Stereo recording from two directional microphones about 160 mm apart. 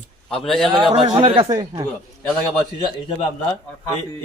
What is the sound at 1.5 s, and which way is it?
Speech, 25° right (ahead or behind).